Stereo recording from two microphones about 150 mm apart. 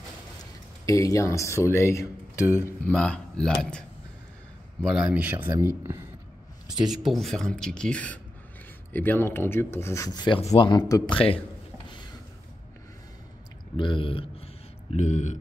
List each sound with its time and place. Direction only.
0.8 s speech: 20° left (ahead or behind)
2.9 s speech: 5° left (ahead or behind)
4.8 s speech: 5° right (ahead or behind)
7.1 s speech: centre (ahead or behind); by 11.1 s 25° left (ahead or behind)
13.7 s a sound: 35° left (ahead or behind); by 15.3 s 50° left (ahead or behind)